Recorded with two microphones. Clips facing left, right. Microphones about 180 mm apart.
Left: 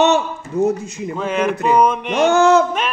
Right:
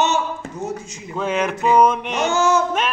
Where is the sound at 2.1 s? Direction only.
60° left (ahead or behind).